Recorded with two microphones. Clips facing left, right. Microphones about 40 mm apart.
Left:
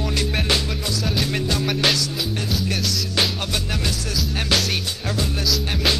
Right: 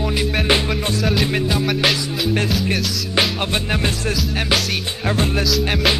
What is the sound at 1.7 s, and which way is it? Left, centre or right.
Music, centre.